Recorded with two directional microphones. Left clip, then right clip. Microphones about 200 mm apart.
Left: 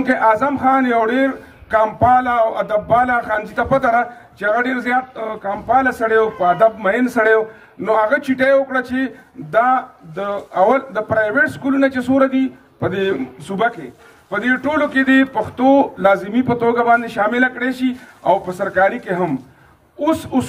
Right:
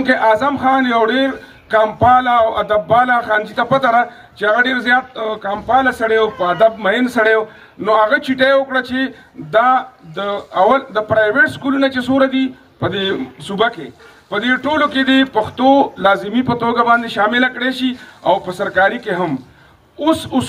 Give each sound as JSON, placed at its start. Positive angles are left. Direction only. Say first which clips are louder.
{"t": 0.0, "sound": "speech", "louder": "right 2 dB", "side_deg": 25}
{"t": 1.7, "sound": "music", "louder": "right 2 dB", "side_deg": 0}
{"t": 2.0, "sound": "speech", "louder": "right 3 dB", "side_deg": 30}
{"t": 6.0, "sound": "speech", "louder": "even", "side_deg": 30}